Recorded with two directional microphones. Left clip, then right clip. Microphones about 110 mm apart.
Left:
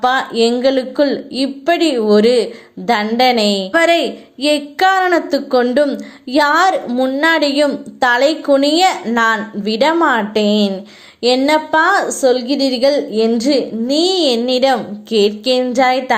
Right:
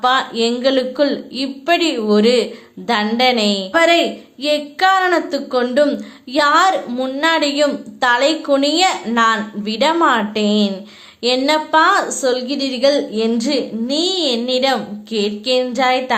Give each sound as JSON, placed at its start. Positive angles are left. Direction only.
{"t": 0.0, "sound": "a woman's voice", "side_deg": 45}
{"t": 6.9, "sound": "speech", "side_deg": 30}
{"t": 7.2, "sound": "a woman's voice", "side_deg": 45}
{"t": 15.7, "sound": "a woman's voice", "side_deg": 40}